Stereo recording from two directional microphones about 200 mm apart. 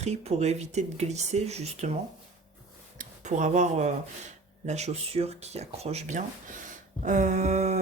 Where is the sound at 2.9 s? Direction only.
35° right (ahead or behind).